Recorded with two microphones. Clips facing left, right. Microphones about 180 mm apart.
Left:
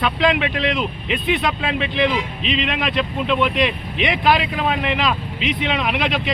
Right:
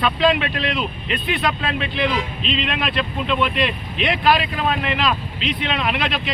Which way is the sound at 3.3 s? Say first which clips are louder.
Left 2 dB; 15° left (ahead or behind).